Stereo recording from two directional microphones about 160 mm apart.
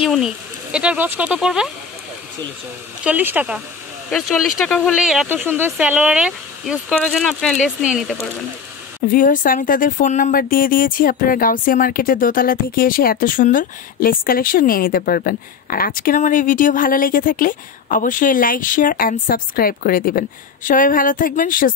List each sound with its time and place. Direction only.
0.0 s speech: 5° right (ahead or behind)
3.0 s speech: 10° right (ahead or behind)
9.0 s speech: 60° left (ahead or behind)